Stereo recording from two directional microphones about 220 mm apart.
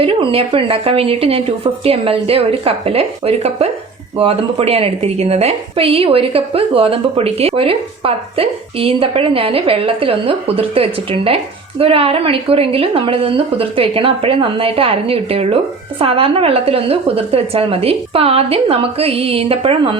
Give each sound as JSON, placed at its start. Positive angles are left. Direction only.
{"t": 0.0, "sound": "a woman's voice", "side_deg": -25}